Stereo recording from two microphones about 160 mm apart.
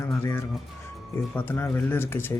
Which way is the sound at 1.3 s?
15° left (ahead or behind).